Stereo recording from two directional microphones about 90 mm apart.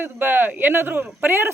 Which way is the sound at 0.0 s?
20° right (ahead or behind).